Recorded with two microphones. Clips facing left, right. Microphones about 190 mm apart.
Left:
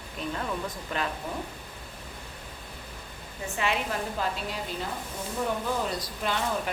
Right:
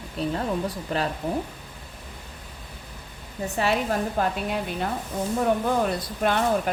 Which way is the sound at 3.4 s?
40° right (ahead or behind).